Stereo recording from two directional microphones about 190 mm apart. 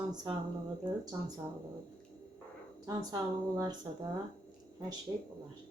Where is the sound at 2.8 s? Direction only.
20° right (ahead or behind).